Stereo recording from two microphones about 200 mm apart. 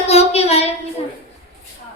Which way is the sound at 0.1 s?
30° left (ahead or behind).